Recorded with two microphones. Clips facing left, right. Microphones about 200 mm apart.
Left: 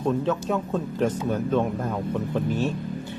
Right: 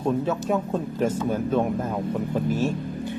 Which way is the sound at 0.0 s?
10° right (ahead or behind).